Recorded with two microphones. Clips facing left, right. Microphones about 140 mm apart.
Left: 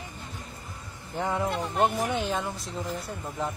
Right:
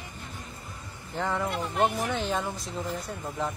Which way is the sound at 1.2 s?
20° left (ahead or behind).